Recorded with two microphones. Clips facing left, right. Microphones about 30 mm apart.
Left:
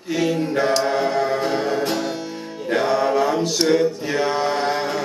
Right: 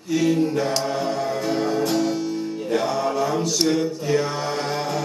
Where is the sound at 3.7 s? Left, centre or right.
Left.